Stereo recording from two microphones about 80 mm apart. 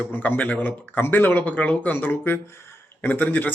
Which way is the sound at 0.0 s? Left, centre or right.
Left.